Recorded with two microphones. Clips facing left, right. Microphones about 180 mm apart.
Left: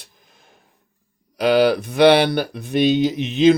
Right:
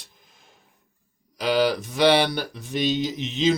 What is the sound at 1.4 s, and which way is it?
Speech, 60° left (ahead or behind).